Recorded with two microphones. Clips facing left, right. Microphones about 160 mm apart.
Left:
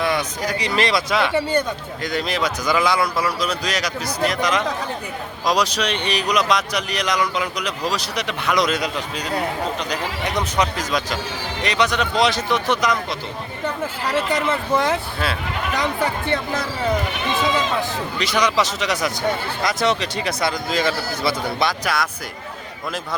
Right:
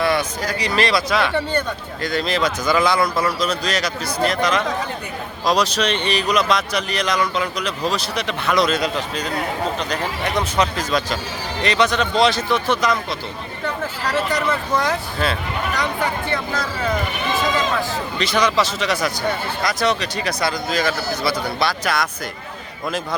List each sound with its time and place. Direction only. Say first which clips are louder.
0.0 s speech: right 2 dB; 15° left (ahead or behind)
14.3 s speech: left 1 dB; 25° left (ahead or behind)
18.2 s speech: right 1 dB; 15° left (ahead or behind)